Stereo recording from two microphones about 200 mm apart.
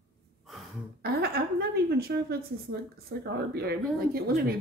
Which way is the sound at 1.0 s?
50° right (ahead or behind).